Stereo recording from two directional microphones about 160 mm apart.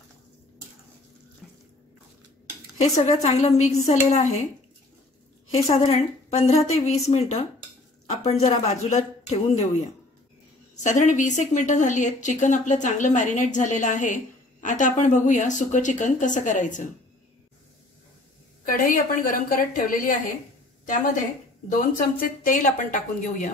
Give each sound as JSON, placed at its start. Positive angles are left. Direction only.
{"t": 1.4, "sound": "sink", "side_deg": -5}
{"t": 2.8, "sound": "a woman's voice", "side_deg": 45}
{"t": 5.5, "sound": "a woman's voice", "side_deg": 40}
{"t": 10.8, "sound": "a woman's voice", "side_deg": 50}
{"t": 18.7, "sound": "a woman's voice", "side_deg": 60}